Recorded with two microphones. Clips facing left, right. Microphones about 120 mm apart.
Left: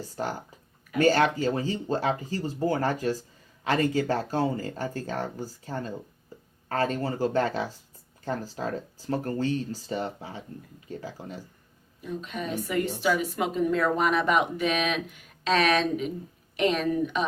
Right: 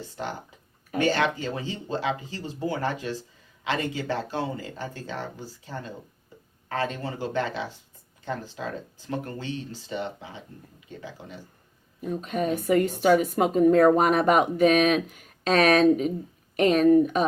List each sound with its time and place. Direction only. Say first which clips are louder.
0.9 s speech: left 2 dB; 40° left (ahead or behind)
12.0 s a woman's voice: right 6 dB; 45° right (ahead or behind)